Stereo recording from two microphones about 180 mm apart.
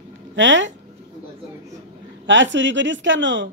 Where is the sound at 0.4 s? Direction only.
90° right.